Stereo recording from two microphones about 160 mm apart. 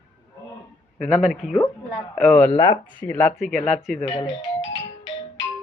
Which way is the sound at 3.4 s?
Centre (ahead or behind).